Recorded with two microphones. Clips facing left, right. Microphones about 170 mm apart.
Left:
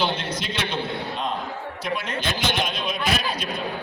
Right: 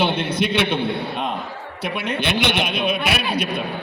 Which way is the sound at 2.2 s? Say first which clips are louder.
Right 6 dB; 65° right (ahead or behind).